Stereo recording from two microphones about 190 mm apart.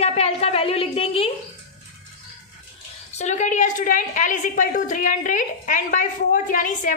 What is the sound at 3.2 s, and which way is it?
A woman's voice, 40° left (ahead or behind).